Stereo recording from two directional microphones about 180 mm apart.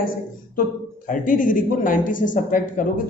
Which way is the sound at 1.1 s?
45° left (ahead or behind).